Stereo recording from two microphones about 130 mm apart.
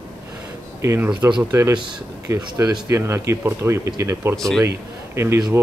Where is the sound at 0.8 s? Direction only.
20° right (ahead or behind).